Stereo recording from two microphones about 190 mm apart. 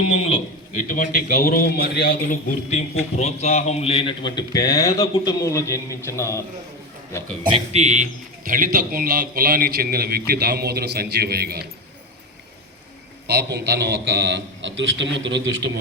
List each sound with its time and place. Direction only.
0.7 s a man's voice: 45° left (ahead or behind)
2.6 s a man's voice: 35° left (ahead or behind); by 6.4 s 15° left (ahead or behind)
7.5 s a man's voice: 35° right (ahead or behind); by 11.6 s 55° right (ahead or behind)
13.2 s a man's voice: 60° right (ahead or behind)